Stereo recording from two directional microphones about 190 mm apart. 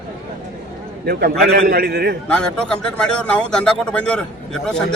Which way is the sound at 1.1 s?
55° right (ahead or behind).